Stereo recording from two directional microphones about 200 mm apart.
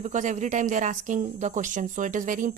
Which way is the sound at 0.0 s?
35° right (ahead or behind).